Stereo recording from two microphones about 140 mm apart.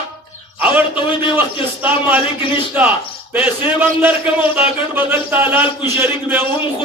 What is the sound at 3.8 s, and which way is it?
Speech, 10° right (ahead or behind).